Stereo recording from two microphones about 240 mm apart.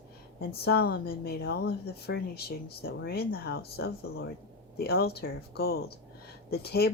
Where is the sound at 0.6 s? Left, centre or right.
Left.